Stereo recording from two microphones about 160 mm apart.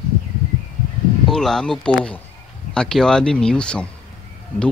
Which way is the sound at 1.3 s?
5° left (ahead or behind).